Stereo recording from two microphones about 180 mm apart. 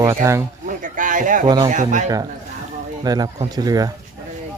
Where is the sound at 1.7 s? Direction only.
45° right (ahead or behind).